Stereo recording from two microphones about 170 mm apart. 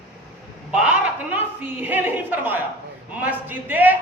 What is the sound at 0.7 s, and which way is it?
A woman's voice, 10° right (ahead or behind).